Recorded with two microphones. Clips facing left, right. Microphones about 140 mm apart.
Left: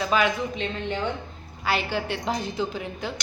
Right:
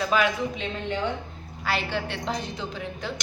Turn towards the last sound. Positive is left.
turn(degrees=5)  # may be behind; listen again after turning